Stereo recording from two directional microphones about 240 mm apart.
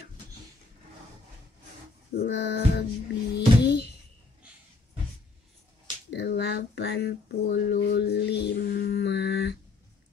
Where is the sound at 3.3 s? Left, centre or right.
Left.